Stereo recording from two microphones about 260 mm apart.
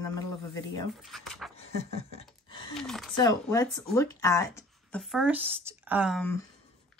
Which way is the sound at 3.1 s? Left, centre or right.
Centre.